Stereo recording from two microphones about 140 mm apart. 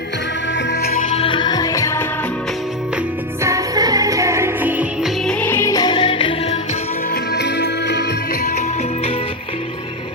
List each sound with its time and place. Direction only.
0.8 s music: 90° left
1.1 s music: 40° left (ahead or behind); by 2.0 s 20° left (ahead or behind)
3.4 s music: 25° right (ahead or behind)
5.0 s music: 5° left (ahead or behind); by 6.3 s 40° left (ahead or behind)